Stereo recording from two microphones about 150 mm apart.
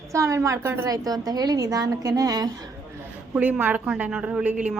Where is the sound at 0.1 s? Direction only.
20° right (ahead or behind).